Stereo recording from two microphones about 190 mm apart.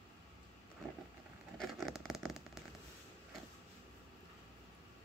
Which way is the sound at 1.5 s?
Centre (ahead or behind).